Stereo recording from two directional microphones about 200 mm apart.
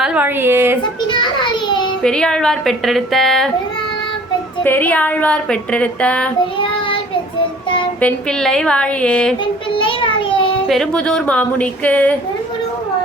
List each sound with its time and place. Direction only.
0.0 s a woman's voice: 5° right (ahead or behind)
1.1 s a child's voice: 25° left (ahead or behind)
2.0 s a woman's voice: 5° left (ahead or behind)
4.6 s speech: 10° left (ahead or behind)
8.0 s a woman's voice: centre (ahead or behind)
9.7 s child singing: 25° left (ahead or behind)
10.7 s speech: 5° left (ahead or behind)